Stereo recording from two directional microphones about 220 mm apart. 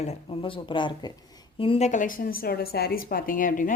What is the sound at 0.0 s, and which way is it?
A woman's voice, 25° left (ahead or behind).